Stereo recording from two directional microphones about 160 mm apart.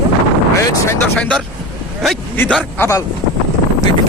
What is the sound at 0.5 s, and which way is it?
Speech, 15° left (ahead or behind).